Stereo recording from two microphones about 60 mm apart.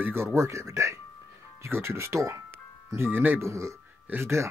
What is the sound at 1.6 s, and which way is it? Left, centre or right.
Speech, right.